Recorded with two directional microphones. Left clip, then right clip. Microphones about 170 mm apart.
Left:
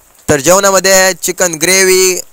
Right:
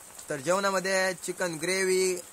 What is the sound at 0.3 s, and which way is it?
Speech, 55° left (ahead or behind).